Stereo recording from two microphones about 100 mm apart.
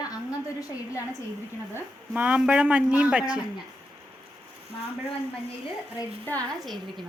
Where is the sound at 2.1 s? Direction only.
15° right (ahead or behind).